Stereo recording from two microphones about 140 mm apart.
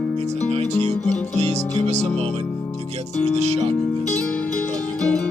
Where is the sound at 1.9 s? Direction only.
50° right (ahead or behind).